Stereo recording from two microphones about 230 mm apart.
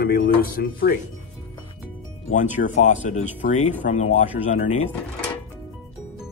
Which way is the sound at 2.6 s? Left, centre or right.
Left.